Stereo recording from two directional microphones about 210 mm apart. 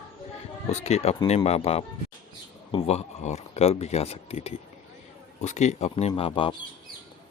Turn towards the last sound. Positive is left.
turn(degrees=25)  # may be behind; listen again after turning